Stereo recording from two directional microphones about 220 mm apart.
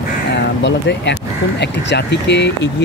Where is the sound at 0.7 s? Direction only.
55° left (ahead or behind).